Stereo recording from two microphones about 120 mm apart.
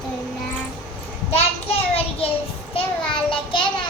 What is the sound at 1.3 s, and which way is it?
Child singing, 60° left (ahead or behind).